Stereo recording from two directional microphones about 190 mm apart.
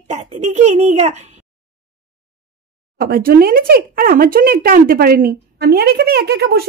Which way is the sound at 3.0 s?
50° right (ahead or behind).